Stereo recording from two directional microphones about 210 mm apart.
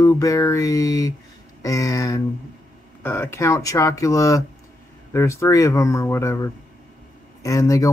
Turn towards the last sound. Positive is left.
turn(degrees=15)  # may be behind; listen again after turning